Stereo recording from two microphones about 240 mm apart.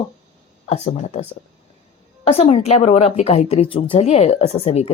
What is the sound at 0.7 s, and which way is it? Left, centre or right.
Speech, left.